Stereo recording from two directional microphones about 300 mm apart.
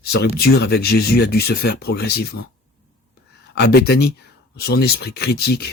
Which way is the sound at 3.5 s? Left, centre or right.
Left.